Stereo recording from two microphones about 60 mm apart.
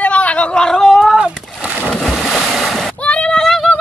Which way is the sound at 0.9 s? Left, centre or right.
Centre.